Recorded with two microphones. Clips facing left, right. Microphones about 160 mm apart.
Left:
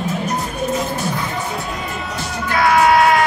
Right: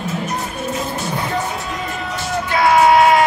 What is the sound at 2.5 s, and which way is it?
Yell, 20° right (ahead or behind).